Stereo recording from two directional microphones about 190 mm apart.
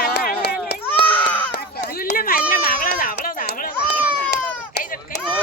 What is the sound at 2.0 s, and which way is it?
Run, 50° left (ahead or behind).